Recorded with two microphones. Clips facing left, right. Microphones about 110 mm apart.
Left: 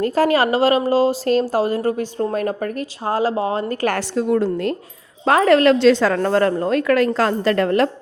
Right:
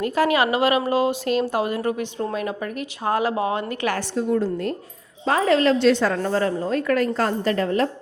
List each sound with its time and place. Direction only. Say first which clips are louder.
0.0 s speech: left 3 dB; 40° left (ahead or behind)
3.1 s speech: left 2 dB; 30° left (ahead or behind)
3.9 s a woman's voice: left 2 dB; 85° left
5.2 s a woman's voice: left 5 dB; 65° left (ahead or behind)